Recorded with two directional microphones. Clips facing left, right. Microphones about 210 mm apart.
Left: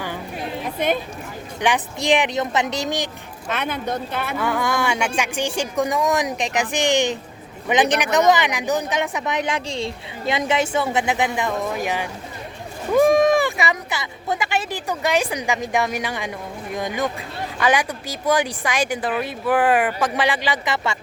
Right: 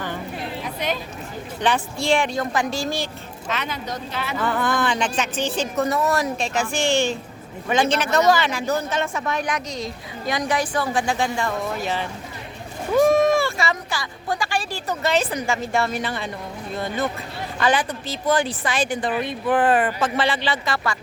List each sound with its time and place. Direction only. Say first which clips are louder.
1.6 s speech: left 1 dB; 15° left (ahead or behind)
3.5 s speech: left 4 dB; 55° left (ahead or behind)
4.4 s speech: even; 10° left (ahead or behind)